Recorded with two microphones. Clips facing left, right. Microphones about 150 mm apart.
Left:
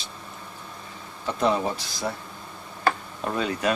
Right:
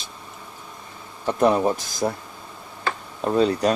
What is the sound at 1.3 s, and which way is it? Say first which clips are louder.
Speech: right 5 dB; 50° right (ahead or behind).